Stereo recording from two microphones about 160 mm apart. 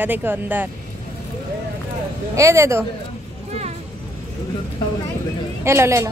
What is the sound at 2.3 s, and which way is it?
Speech, 20° right (ahead or behind).